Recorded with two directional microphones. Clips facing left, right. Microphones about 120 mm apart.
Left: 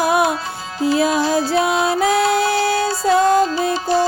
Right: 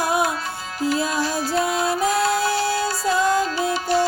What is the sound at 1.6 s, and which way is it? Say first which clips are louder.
Music: left 4 dB; 75° left (ahead or behind).